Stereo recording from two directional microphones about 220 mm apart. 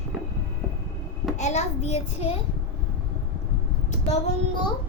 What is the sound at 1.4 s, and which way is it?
Speech, 30° left (ahead or behind).